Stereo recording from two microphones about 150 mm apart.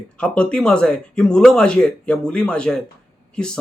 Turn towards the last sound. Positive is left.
turn(degrees=5)  # may be behind; listen again after turning